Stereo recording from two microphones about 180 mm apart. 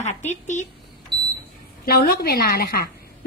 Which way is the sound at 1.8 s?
55° left (ahead or behind).